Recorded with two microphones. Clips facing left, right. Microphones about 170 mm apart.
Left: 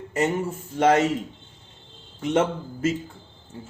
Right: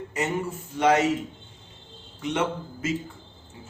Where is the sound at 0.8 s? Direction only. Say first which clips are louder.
Left 2 dB; 45° left (ahead or behind).